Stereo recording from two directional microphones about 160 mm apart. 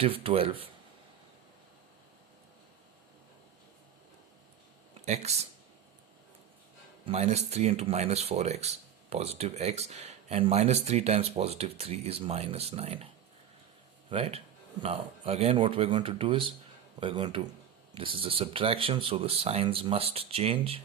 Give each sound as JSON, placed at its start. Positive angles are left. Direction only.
{"t": 0.0, "sound": "speech", "side_deg": -35}
{"t": 5.0, "sound": "speech", "side_deg": -45}
{"t": 7.0, "sound": "speech", "side_deg": -40}
{"t": 14.1, "sound": "speech", "side_deg": -35}